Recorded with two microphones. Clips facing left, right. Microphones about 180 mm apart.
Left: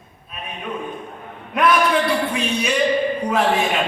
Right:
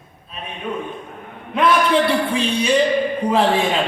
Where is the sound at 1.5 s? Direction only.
30° right (ahead or behind).